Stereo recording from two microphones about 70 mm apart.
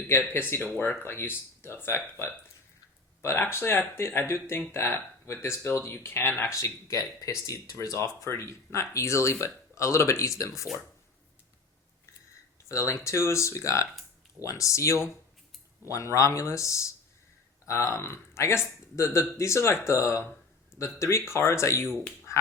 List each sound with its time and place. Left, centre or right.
0.3 s speech: left
6.4 s speech: left
12.6 s speech: left
22.3 s frog: left